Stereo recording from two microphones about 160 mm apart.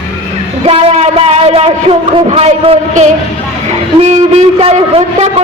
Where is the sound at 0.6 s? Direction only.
40° right (ahead or behind).